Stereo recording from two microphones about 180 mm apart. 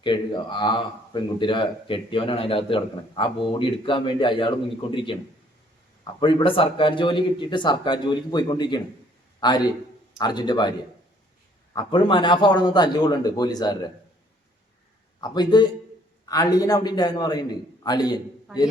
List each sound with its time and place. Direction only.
0.0 s speech: 25° left (ahead or behind)
6.1 s speech: 30° left (ahead or behind)
11.7 s speech: 25° left (ahead or behind)
15.2 s speech: 25° left (ahead or behind)